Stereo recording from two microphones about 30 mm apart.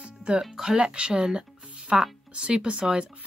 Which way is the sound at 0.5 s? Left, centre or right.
Centre.